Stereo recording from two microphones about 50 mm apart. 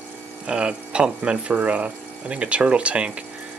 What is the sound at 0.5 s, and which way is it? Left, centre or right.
Speech, right.